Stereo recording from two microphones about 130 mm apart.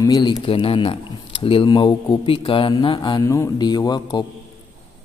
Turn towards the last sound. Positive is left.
turn(degrees=30)  # may be behind; listen again after turning